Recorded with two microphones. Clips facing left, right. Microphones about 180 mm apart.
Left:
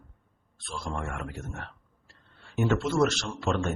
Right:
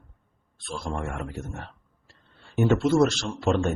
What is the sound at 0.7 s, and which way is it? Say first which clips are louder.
Speech: right 3 dB; 30° right (ahead or behind).